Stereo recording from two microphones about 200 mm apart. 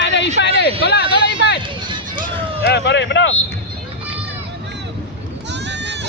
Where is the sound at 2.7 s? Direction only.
60° left (ahead or behind).